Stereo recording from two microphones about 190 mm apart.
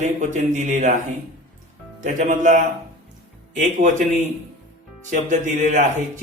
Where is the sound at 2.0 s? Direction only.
40° right (ahead or behind).